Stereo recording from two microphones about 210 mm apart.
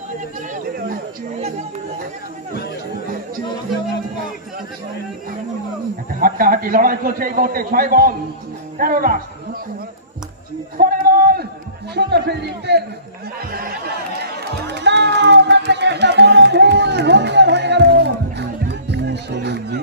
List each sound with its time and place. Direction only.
0.5 s chatter: 40° right (ahead or behind)
6.1 s a man's voice: 40° right (ahead or behind)
10.8 s a sound: 45° right (ahead or behind)
11.9 s music: 50° right (ahead or behind)
13.5 s a sound: 45° right (ahead or behind)
14.2 s music: 50° right (ahead or behind)